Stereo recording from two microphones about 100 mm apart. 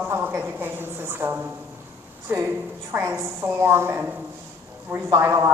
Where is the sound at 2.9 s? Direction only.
20° right (ahead or behind).